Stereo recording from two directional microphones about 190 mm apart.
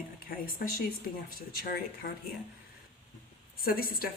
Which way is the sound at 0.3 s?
50° left (ahead or behind).